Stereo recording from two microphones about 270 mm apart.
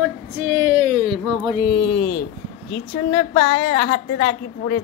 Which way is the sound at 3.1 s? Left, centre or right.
Left.